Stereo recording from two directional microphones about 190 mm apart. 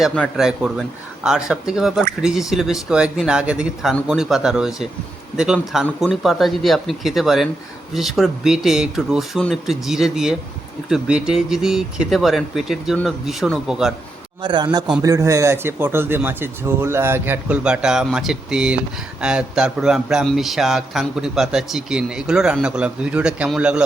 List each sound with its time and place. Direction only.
0.0 s speech: centre (ahead or behind)
14.4 s a man's voice: 25° right (ahead or behind); by 23.8 s 5° right (ahead or behind)